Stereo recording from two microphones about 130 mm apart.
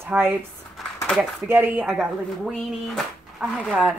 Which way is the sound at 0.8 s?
Centre (ahead or behind).